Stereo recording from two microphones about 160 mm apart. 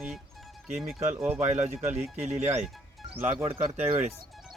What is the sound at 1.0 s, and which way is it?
Speech, 45° right (ahead or behind).